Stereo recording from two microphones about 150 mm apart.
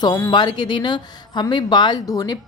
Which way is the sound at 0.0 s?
25° left (ahead or behind).